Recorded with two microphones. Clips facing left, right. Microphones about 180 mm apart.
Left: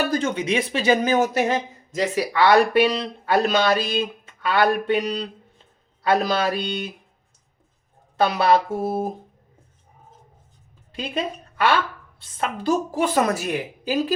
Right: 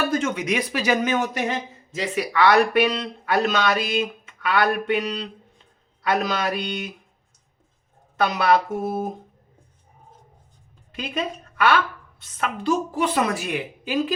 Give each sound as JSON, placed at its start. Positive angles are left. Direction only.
{"t": 0.0, "sound": "speech", "side_deg": 35}
{"t": 8.1, "sound": "speech", "side_deg": 30}
{"t": 10.9, "sound": "a woman's voice", "side_deg": 30}